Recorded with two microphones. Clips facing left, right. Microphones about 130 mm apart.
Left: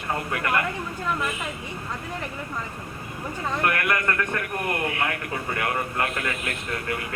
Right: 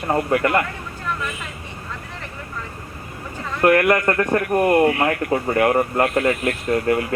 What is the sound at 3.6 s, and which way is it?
Speech, 35° right (ahead or behind).